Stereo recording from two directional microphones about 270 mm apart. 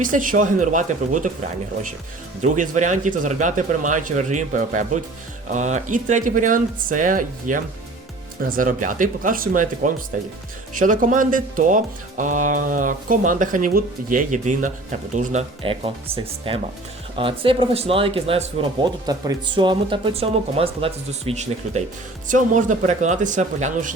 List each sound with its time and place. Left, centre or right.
0.0 s speech: right
2.4 s speech: right